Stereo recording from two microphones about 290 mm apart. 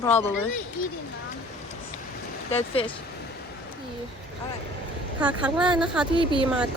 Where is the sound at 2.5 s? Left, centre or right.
Centre.